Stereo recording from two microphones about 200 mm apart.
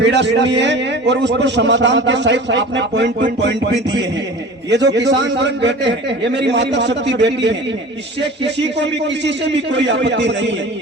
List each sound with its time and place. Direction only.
0.0 s a man's voice: 60° right (ahead or behind)